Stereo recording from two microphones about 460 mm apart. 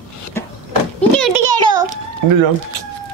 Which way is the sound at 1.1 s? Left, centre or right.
Centre.